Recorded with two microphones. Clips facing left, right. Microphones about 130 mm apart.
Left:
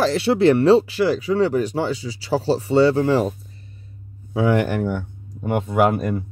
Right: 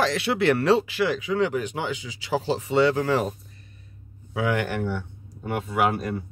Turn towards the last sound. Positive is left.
turn(degrees=45)  # may be behind; listen again after turning